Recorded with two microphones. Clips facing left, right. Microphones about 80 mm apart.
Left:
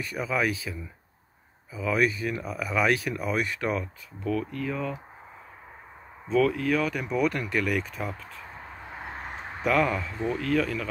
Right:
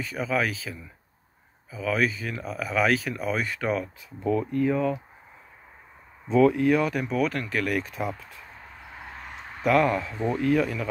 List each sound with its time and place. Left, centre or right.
0.1 s speech: centre
4.2 s speech: centre
6.2 s speech: centre
9.0 s a sound: left
9.6 s speech: centre